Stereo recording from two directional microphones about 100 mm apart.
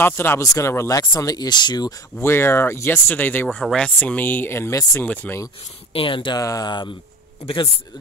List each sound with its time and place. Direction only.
0.0 s speech: 25° left (ahead or behind); by 2.0 s 45° left (ahead or behind)
2.2 s speech: 25° left (ahead or behind)
5.1 s speech: 15° left (ahead or behind)
5.9 s speech: 60° left (ahead or behind)
6.4 s speech: 35° left (ahead or behind)
7.4 s speech: 65° left (ahead or behind)